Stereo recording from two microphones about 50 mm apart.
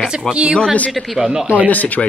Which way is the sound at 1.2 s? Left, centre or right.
Centre.